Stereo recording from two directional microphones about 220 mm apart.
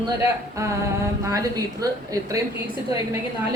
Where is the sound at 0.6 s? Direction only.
15° right (ahead or behind).